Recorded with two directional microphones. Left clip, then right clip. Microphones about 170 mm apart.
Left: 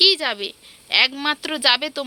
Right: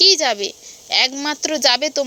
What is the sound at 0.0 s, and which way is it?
A woman's voice, 15° right (ahead or behind).